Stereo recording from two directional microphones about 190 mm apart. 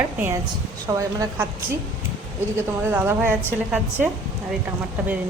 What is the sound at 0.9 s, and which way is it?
Speech, 15° right (ahead or behind).